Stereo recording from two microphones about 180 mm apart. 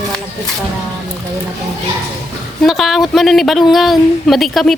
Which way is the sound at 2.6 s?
Centre (ahead or behind).